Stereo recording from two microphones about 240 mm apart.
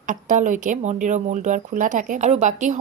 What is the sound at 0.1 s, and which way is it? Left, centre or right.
A woman's voice, right.